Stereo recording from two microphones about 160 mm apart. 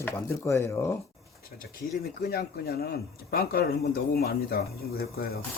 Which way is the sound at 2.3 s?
75° left (ahead or behind).